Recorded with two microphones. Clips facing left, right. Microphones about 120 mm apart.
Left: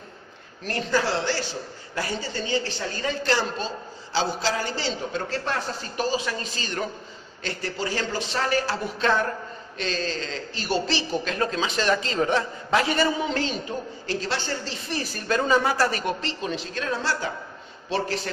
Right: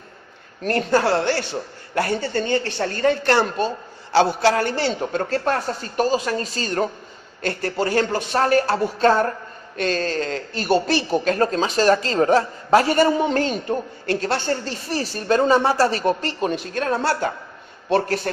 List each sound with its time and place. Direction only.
0.6 s a man's voice: 50° right (ahead or behind)
7.4 s speech: 50° right (ahead or behind)
15.0 s speech: 35° right (ahead or behind); by 18.3 s 50° right (ahead or behind)